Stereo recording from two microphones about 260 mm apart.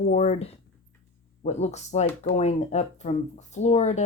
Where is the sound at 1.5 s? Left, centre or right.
Left.